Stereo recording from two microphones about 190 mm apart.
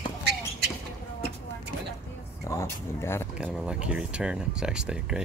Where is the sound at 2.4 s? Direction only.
15° left (ahead or behind).